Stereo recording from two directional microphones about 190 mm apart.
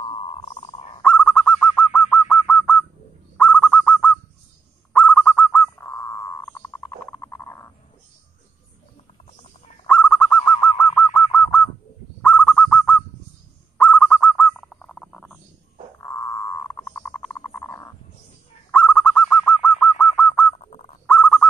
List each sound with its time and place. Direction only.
0.0 s a sound: 30° left (ahead or behind)
1.0 s owl: 5° left (ahead or behind)
4.9 s bird: 5° left (ahead or behind)
9.8 s owl: 5° left (ahead or behind)
12.2 s goose: 5° left (ahead or behind)
13.7 s owl: 5° left (ahead or behind)
16.0 s frog: 15° left (ahead or behind)
18.7 s owl: 5° left (ahead or behind)
21.1 s goose: 5° left (ahead or behind)